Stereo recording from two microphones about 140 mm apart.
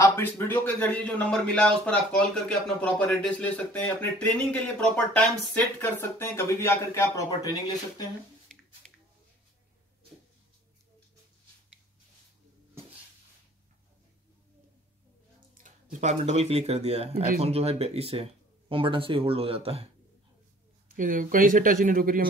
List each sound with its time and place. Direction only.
0.0 s a man's voice: 15° left (ahead or behind)
8.8 s a sound: 5° left (ahead or behind)
15.5 s speech: 65° right (ahead or behind); by 19.9 s 45° right (ahead or behind)
20.9 s speech: 75° right (ahead or behind)